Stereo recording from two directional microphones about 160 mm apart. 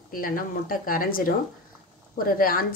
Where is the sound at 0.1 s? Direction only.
60° left (ahead or behind).